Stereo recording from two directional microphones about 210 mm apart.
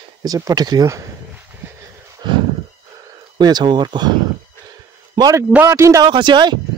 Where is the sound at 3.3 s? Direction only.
20° right (ahead or behind).